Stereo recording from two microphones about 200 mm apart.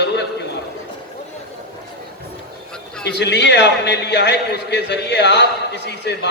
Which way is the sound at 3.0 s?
60° left (ahead or behind).